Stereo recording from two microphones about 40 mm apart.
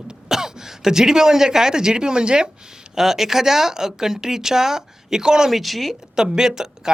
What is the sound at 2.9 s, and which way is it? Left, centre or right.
Speech, centre.